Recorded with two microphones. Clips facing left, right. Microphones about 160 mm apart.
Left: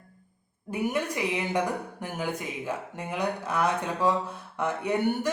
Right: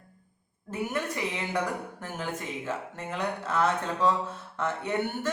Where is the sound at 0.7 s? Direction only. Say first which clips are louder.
Left 3 dB; 15° left (ahead or behind).